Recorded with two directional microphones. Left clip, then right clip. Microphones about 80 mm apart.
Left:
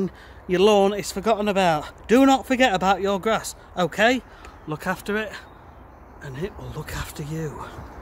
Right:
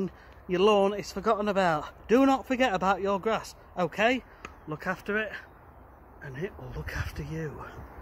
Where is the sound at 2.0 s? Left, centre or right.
Left.